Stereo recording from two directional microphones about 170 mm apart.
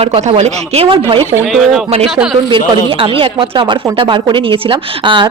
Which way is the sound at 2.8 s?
30° right (ahead or behind).